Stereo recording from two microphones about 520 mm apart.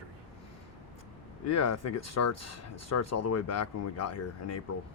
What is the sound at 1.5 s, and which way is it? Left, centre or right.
Speech, left.